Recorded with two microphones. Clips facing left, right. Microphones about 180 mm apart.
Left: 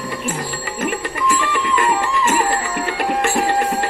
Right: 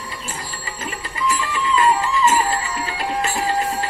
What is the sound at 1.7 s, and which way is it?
Music, 55° left (ahead or behind).